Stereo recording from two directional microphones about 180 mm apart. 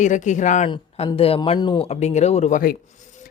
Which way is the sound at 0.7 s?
30° left (ahead or behind).